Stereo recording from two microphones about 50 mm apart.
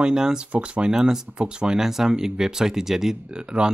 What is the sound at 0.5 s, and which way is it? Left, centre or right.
Speech, right.